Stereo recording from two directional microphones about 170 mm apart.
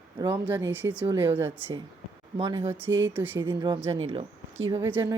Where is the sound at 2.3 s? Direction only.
30° right (ahead or behind).